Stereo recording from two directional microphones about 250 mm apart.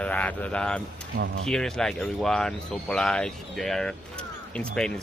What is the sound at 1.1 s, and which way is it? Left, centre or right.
Mantra, right.